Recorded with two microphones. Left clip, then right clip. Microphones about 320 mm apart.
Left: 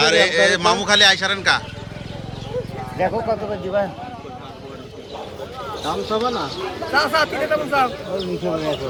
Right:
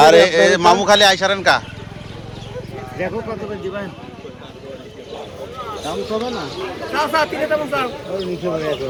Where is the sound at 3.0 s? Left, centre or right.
Left.